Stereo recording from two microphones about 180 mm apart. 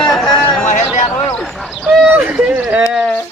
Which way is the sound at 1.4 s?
Centre (ahead or behind).